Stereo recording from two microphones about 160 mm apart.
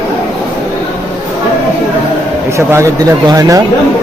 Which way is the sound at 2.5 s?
20° right (ahead or behind).